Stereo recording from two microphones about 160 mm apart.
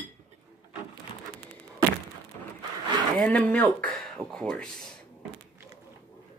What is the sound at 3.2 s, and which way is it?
Speech, 5° left (ahead or behind).